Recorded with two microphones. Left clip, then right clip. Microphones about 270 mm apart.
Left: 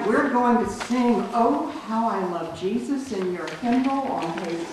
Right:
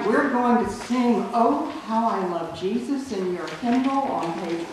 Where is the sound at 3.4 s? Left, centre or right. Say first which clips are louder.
Even; centre.